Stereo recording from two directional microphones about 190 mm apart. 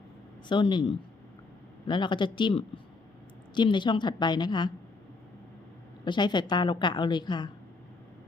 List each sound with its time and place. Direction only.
0.4 s a woman's voice: 25° left (ahead or behind)
6.1 s a woman's voice: 25° left (ahead or behind)